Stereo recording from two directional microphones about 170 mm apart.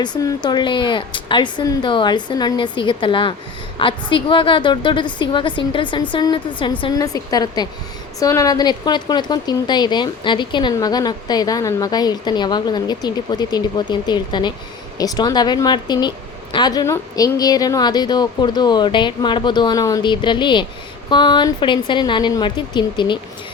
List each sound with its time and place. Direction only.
0.0 s a woman's voice: 25° left (ahead or behind)